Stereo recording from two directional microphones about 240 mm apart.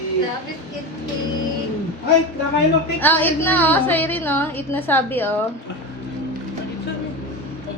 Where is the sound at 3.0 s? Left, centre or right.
Centre.